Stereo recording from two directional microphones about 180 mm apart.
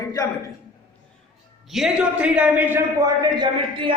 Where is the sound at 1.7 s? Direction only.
Centre (ahead or behind); by 4.0 s 25° right (ahead or behind).